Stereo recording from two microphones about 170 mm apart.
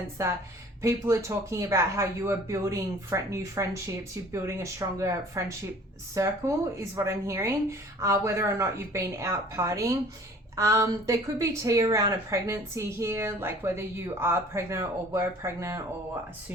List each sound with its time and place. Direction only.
0.2 s a woman's voice: 15° right (ahead or behind)